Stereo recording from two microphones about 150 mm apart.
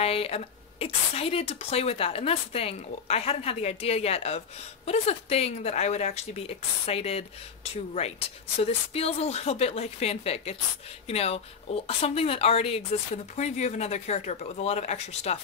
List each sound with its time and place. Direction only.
0.0 s a woman's voice: 40° left (ahead or behind)